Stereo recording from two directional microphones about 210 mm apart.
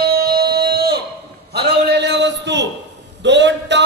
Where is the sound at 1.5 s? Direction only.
50° right (ahead or behind).